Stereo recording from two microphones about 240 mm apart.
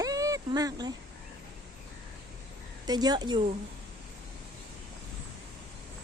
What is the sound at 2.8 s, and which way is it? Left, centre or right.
Speech, centre.